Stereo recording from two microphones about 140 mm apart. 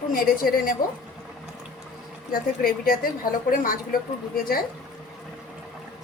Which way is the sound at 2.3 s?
90° left.